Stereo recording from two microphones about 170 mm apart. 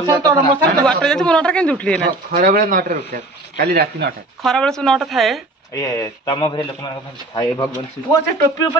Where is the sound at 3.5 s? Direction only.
70° right (ahead or behind).